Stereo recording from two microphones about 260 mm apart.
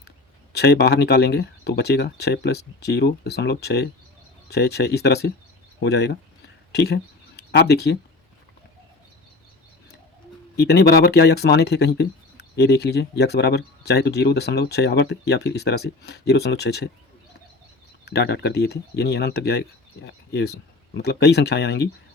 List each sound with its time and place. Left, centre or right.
0.5 s speech: left
10.6 s speech: left
18.0 s speech: left